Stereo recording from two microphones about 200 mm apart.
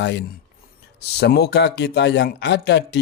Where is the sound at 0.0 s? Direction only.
60° left (ahead or behind).